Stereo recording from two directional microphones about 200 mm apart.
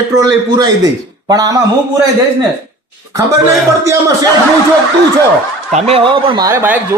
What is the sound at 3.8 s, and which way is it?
Speech, 15° right (ahead or behind).